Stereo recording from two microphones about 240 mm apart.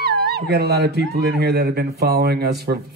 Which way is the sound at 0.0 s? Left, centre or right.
Right.